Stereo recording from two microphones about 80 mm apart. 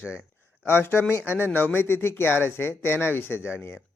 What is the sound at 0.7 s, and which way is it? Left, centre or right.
A man's voice, left.